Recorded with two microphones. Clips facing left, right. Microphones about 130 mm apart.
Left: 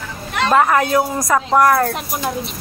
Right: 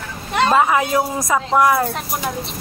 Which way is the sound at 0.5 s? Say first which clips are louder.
Left 4 dB; 10° right (ahead or behind).